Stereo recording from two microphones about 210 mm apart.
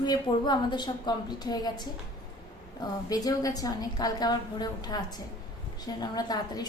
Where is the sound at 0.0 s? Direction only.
20° left (ahead or behind).